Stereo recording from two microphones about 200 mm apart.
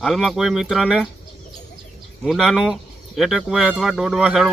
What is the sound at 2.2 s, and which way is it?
Speech, centre (ahead or behind).